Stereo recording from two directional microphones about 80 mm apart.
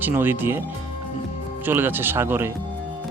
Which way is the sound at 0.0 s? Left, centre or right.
Right.